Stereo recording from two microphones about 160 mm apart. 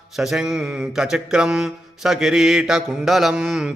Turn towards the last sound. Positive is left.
turn(degrees=-5)  # may be behind; listen again after turning